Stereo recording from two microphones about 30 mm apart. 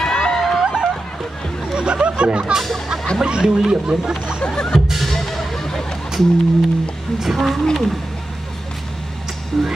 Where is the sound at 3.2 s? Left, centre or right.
Right.